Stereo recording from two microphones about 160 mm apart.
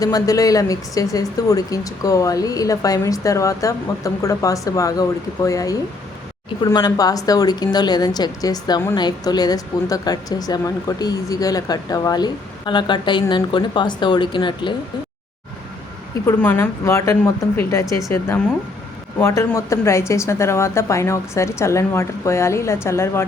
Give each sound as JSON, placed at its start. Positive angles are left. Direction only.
{"t": 0.0, "sound": "speech", "side_deg": 20}
{"t": 16.2, "sound": "a woman's voice", "side_deg": 15}